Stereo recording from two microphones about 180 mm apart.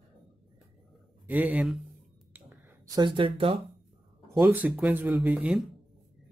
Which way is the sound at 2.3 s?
20° right (ahead or behind).